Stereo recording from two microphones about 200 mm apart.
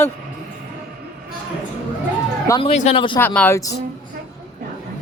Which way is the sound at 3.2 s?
10° left (ahead or behind).